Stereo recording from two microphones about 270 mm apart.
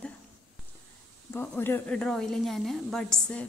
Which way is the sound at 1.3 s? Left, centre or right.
Centre.